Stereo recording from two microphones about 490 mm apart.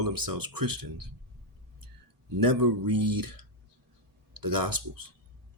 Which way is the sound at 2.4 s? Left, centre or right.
Right.